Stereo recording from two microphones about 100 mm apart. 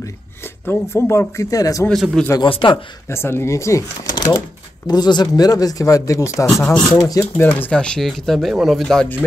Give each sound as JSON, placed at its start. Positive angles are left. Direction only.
{"t": 0.0, "sound": "speech", "side_deg": 25}
{"t": 1.9, "sound": "speech", "side_deg": 5}
{"t": 2.4, "sound": "a man's voice", "side_deg": 55}
{"t": 3.1, "sound": "speech", "side_deg": 25}
{"t": 4.8, "sound": "speech", "side_deg": 45}
{"t": 6.4, "sound": "speech", "side_deg": 10}
{"t": 7.0, "sound": "speech", "side_deg": 35}
{"t": 7.3, "sound": "speech", "side_deg": 20}
{"t": 7.8, "sound": "speech", "side_deg": 5}